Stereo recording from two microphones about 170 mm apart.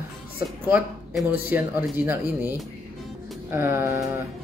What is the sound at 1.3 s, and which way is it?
Speech, 10° right (ahead or behind).